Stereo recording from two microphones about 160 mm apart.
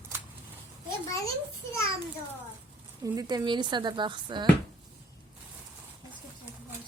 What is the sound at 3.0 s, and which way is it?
Speech, 25° right (ahead or behind).